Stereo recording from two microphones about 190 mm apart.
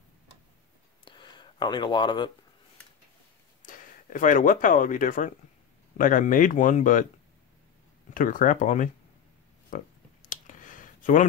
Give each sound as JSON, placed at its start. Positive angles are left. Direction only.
{"t": 1.0, "sound": "a sound", "side_deg": 25}
{"t": 3.6, "sound": "speech", "side_deg": 45}
{"t": 8.1, "sound": "speech", "side_deg": 45}
{"t": 10.2, "sound": "clicking", "side_deg": 45}